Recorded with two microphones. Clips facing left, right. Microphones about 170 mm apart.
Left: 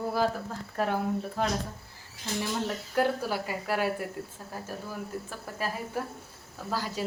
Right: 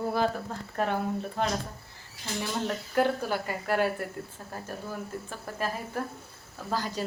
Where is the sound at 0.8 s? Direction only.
5° left (ahead or behind).